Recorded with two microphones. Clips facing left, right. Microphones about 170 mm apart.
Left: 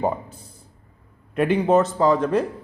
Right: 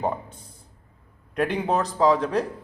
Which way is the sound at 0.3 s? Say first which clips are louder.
Left 3 dB; 30° left (ahead or behind).